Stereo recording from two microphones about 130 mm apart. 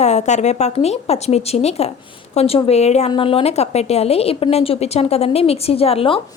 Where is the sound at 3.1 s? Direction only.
45° left (ahead or behind).